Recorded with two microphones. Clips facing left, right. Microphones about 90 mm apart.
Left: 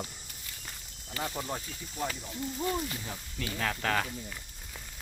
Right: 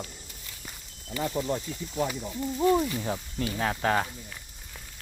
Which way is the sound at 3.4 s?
25° right (ahead or behind).